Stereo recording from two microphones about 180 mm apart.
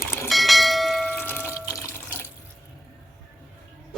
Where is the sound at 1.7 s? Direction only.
15° left (ahead or behind).